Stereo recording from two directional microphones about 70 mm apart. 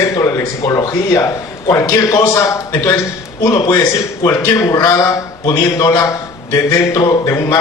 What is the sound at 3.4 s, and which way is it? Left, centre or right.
Speech, left.